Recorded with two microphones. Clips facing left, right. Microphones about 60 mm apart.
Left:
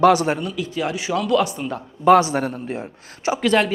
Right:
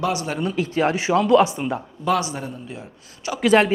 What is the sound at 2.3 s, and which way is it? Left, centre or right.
Speech, left.